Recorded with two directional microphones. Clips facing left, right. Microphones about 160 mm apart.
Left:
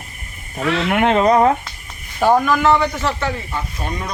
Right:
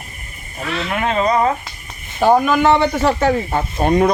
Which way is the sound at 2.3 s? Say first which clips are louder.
Right 2 dB; 20° right (ahead or behind).